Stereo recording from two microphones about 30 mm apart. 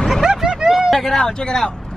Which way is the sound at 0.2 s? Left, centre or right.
Right.